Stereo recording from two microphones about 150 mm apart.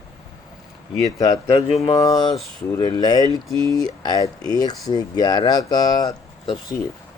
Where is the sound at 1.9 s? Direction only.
20° left (ahead or behind).